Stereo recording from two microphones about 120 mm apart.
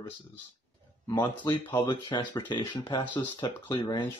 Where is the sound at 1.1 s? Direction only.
40° left (ahead or behind).